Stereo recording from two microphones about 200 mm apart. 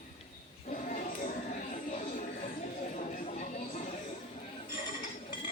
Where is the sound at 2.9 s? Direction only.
35° left (ahead or behind).